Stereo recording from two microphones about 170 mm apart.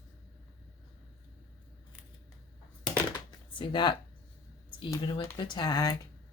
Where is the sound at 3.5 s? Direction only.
30° left (ahead or behind).